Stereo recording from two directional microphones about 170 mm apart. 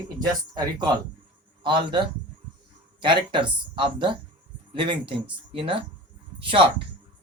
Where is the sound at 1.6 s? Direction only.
30° right (ahead or behind).